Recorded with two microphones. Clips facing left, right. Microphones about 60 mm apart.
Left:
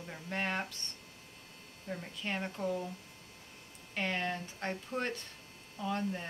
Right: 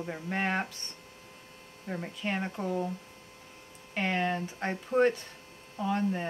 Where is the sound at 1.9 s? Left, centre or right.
Right.